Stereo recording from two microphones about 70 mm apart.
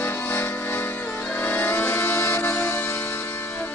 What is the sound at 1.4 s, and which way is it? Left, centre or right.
Music, left.